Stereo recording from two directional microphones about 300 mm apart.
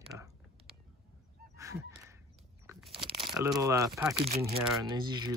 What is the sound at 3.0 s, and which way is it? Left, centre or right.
Crumpling, centre.